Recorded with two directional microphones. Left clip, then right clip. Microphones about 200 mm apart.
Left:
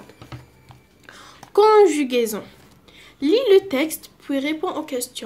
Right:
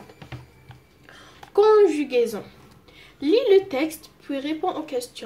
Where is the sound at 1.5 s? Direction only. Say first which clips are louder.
Left 3 dB; 40° left (ahead or behind).